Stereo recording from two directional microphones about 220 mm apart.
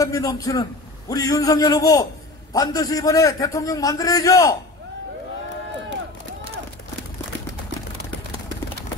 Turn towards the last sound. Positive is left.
turn(degrees=-55)  # may be behind; listen again after turning